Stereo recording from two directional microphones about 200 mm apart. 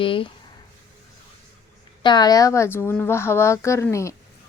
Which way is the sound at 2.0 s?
20° left (ahead or behind).